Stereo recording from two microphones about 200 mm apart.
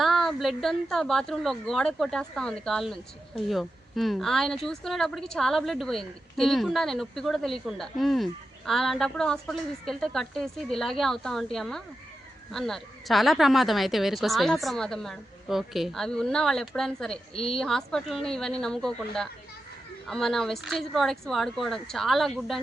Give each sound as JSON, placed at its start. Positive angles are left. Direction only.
{"t": 0.0, "sound": "speech", "side_deg": 0}
{"t": 17.3, "sound": "speech", "side_deg": 30}
{"t": 17.6, "sound": "speech", "side_deg": 0}